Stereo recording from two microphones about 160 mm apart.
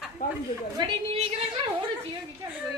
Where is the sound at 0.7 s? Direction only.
35° right (ahead or behind).